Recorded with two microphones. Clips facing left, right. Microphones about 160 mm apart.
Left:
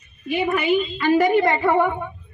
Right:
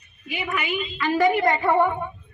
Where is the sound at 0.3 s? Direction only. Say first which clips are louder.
Left 8 dB; 35° left (ahead or behind).